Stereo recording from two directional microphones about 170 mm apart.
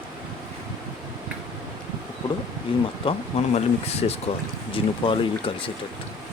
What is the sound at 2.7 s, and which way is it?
Speech, 30° left (ahead or behind).